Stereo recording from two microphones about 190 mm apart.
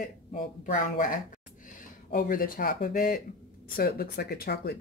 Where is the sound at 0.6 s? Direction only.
45° left (ahead or behind).